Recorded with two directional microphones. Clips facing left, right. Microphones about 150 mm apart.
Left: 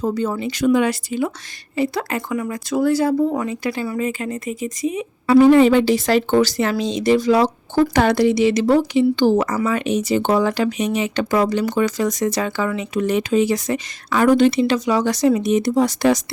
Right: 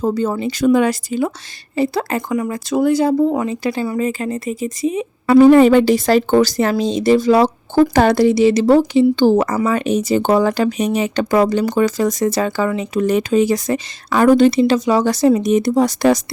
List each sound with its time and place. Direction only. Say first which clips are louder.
0.0 s speech: right 3 dB; 40° right (ahead or behind)
5.2 s a woman's voice: right 3 dB; 45° right (ahead or behind)